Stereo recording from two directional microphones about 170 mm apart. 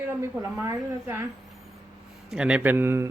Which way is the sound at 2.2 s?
5° right (ahead or behind).